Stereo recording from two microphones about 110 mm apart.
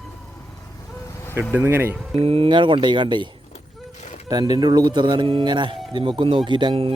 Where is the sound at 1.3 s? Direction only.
20° right (ahead or behind).